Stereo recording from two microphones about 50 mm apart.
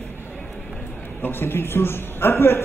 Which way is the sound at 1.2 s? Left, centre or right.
Left.